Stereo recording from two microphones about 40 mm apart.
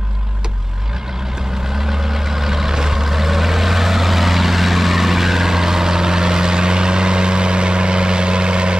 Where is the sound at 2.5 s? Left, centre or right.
Centre.